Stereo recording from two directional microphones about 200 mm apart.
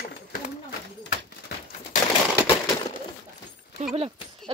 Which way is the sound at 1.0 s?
50° left (ahead or behind).